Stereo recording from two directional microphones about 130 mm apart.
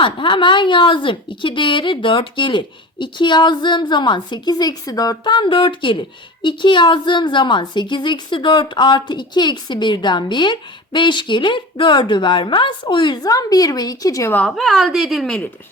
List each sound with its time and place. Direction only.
0.0 s a woman's voice: 40° left (ahead or behind); by 14.4 s 20° left (ahead or behind)
14.4 s a woman's voice: centre (ahead or behind)